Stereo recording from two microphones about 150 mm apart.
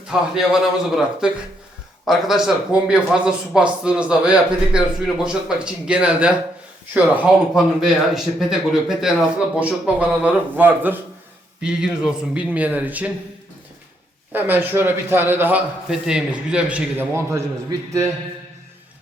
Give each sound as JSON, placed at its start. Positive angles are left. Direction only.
{"t": 0.1, "sound": "speech", "side_deg": -5}
{"t": 14.3, "sound": "speech", "side_deg": -10}
{"t": 17.7, "sound": "speech", "side_deg": -25}